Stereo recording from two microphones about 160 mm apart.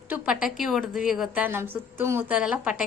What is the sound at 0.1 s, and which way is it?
A woman's voice, 5° right (ahead or behind).